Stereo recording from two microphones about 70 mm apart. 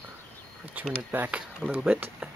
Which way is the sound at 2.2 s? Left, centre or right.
Right.